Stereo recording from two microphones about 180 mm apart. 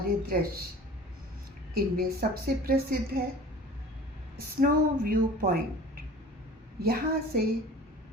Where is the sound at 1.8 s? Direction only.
55° right (ahead or behind).